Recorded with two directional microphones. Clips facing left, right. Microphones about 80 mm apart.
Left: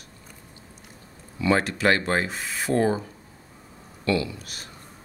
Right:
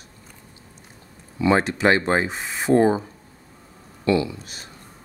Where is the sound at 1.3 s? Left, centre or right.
Right.